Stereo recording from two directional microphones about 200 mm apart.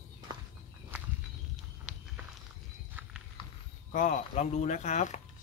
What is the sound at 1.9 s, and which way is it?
Walk, 5° right (ahead or behind).